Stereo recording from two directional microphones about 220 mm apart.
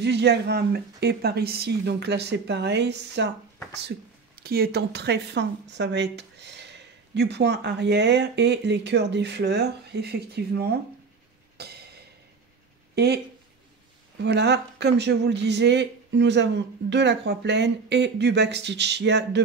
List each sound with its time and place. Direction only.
0.0 s speech: 50° right (ahead or behind)
4.4 s speech: 45° right (ahead or behind)
11.5 s a sound: 45° right (ahead or behind)
12.9 s speech: 45° right (ahead or behind)